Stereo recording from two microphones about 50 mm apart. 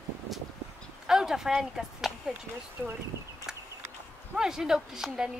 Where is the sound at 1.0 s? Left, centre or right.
Centre.